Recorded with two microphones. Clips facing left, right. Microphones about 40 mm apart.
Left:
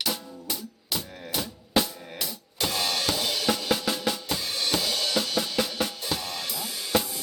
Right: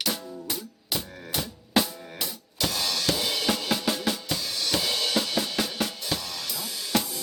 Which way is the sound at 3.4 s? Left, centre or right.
Centre.